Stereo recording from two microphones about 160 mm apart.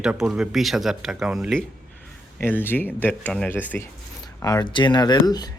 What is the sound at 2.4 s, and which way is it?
Speech, 10° left (ahead or behind).